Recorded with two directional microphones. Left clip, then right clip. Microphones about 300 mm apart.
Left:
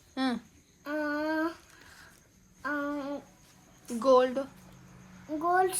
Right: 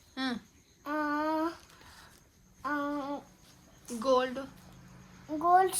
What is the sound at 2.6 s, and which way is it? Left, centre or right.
A child's voice, centre.